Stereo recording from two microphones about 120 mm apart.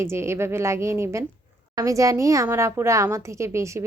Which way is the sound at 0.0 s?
20° right (ahead or behind).